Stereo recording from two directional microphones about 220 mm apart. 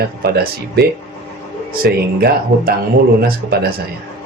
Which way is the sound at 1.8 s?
45° right (ahead or behind).